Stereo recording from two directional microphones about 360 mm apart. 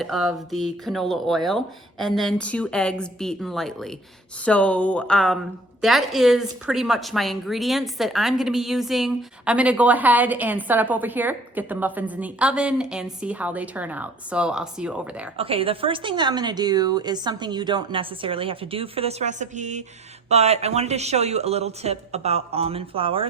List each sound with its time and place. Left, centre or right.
0.0 s a woman's voice: centre
15.4 s a woman's voice: centre